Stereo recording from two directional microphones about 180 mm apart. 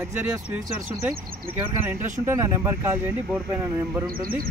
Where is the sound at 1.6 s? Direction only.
10° right (ahead or behind).